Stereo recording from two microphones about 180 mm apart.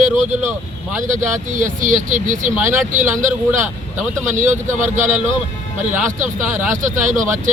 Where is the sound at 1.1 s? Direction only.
45° right (ahead or behind).